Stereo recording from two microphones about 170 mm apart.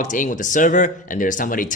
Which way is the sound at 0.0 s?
50° left (ahead or behind).